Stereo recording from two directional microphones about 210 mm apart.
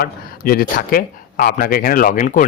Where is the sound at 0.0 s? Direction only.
45° left (ahead or behind).